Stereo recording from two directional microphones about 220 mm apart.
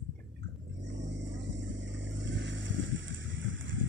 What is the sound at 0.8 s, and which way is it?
Vehicle, 55° right (ahead or behind).